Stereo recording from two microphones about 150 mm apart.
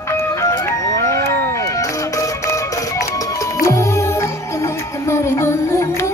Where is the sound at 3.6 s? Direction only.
20° left (ahead or behind).